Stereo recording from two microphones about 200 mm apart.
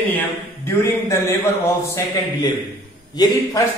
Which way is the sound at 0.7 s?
15° left (ahead or behind).